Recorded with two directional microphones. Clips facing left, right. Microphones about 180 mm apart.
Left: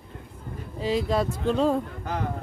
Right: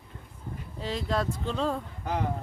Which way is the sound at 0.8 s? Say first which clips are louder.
Left 6 dB; 10° left (ahead or behind).